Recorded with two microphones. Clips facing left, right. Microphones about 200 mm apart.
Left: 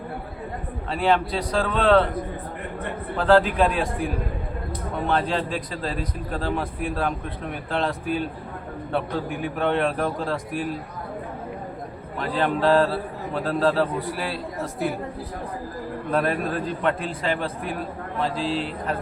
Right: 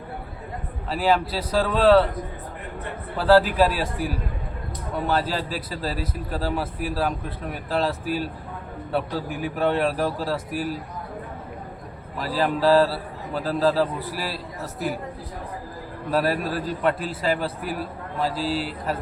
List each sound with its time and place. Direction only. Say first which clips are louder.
0.9 s a man's voice: even; 5° right (ahead or behind)
3.2 s a man's voice: right 1 dB; 5° right (ahead or behind)
12.2 s a man's voice: even; 5° right (ahead or behind)
16.1 s a man's voice: right 1 dB; 5° right (ahead or behind)